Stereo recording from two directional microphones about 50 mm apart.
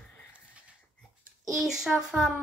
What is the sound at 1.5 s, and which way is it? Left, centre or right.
Speech, centre.